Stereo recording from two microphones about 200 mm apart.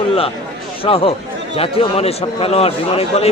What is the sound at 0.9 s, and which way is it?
A man's voice, 30° left (ahead or behind).